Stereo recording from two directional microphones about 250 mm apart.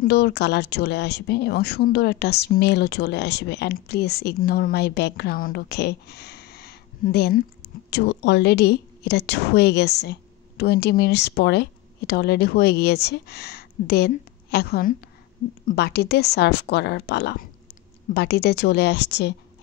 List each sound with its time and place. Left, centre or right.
0.0 s speech: left